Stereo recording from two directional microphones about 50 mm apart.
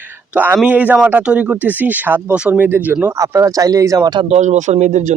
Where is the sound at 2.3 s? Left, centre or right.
Right.